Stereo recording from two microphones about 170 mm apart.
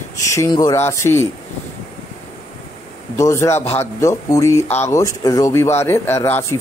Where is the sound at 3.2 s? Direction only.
15° left (ahead or behind).